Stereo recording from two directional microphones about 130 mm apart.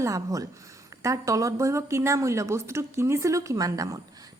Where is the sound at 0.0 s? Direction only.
25° right (ahead or behind).